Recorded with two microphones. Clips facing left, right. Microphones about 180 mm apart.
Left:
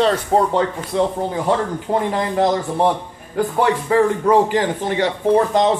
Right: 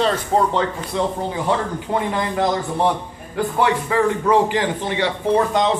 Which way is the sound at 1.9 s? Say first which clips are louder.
Left 3 dB; 35° left (ahead or behind).